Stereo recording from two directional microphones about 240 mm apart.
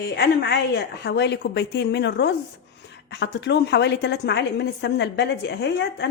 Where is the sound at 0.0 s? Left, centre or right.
Left.